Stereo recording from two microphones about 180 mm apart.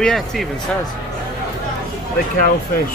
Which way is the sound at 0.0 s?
Centre (ahead or behind).